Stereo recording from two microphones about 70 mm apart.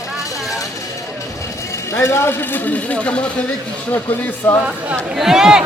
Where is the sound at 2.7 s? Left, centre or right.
Centre.